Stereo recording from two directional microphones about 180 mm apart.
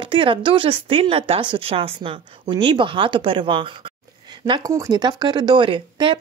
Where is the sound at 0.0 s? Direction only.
30° right (ahead or behind).